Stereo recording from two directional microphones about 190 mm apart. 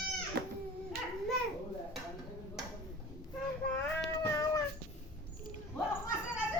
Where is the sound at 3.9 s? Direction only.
10° left (ahead or behind).